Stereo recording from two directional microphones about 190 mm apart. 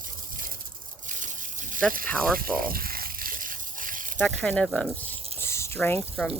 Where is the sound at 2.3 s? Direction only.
50° right (ahead or behind).